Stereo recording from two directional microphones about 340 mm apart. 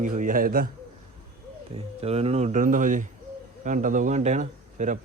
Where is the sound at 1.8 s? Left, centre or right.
Centre.